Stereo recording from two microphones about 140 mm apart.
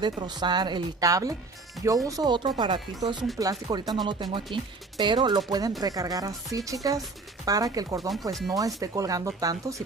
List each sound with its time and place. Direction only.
0.0 s speech: 30° right (ahead or behind)